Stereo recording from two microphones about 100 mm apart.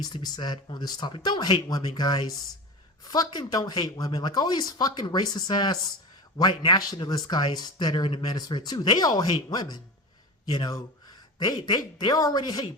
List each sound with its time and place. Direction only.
0.0 s speech: 45° left (ahead or behind)